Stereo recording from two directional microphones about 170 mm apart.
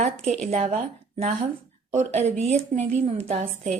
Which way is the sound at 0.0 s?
40° right (ahead or behind).